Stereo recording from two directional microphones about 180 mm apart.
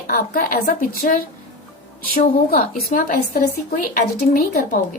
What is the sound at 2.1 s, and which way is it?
A woman's voice, 50° left (ahead or behind).